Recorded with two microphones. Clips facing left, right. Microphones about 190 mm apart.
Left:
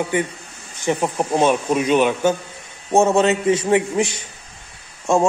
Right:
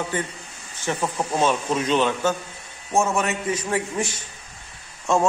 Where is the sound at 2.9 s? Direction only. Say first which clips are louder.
Left 7 dB; 30° left (ahead or behind).